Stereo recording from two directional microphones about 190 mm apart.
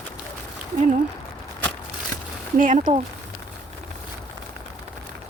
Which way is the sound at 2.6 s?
40° right (ahead or behind).